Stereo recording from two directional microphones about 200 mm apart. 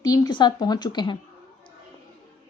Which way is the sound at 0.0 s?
20° left (ahead or behind).